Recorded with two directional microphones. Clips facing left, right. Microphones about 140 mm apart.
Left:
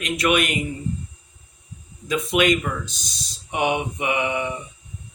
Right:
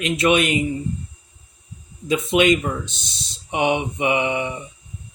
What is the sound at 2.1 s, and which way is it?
Speech, 25° right (ahead or behind).